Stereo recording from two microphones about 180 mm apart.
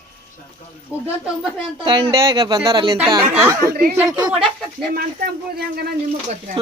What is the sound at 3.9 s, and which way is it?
Speech, 20° right (ahead or behind).